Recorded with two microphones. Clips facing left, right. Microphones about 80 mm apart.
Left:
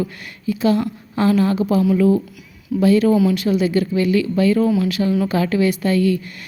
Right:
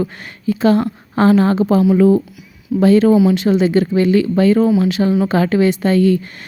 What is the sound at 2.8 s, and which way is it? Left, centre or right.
A woman's voice, right.